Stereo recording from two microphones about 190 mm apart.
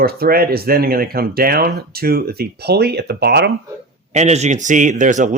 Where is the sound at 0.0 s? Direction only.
55° right (ahead or behind).